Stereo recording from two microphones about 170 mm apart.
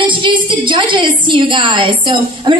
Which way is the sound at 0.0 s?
30° right (ahead or behind).